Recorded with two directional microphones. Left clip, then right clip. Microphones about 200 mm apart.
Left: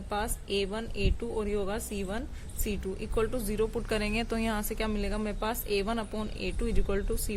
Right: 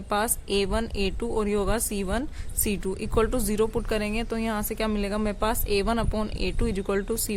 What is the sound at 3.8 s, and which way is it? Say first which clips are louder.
A woman's voice: right 3 dB; 15° right (ahead or behind).